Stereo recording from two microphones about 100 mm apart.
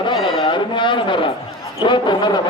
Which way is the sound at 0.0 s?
50° left (ahead or behind).